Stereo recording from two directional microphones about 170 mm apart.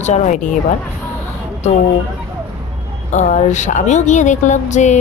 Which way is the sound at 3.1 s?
45° left (ahead or behind).